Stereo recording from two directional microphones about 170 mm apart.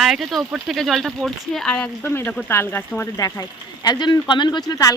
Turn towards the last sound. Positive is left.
turn(degrees=20)  # may be behind; listen again after turning